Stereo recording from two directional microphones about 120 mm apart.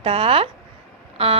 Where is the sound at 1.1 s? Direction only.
55° right (ahead or behind).